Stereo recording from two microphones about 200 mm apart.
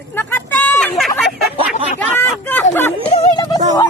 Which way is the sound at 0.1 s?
10° left (ahead or behind).